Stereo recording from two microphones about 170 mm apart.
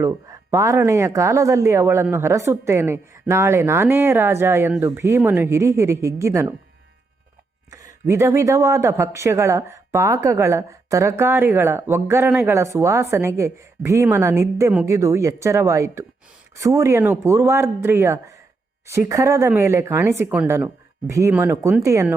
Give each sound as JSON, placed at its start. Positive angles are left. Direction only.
{"t": 0.0, "sound": "speech", "side_deg": -20}
{"t": 8.0, "sound": "speech", "side_deg": -15}